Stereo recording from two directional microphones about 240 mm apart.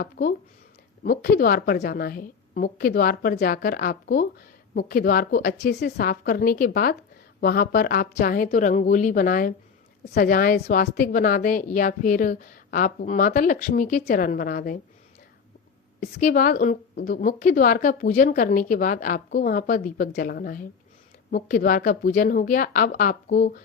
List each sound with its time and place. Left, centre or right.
0.0 s a woman's voice: left
16.0 s a woman's voice: left